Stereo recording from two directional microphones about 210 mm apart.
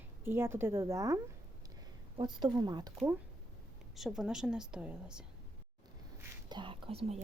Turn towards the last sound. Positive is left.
turn(degrees=-25)  # may be behind; listen again after turning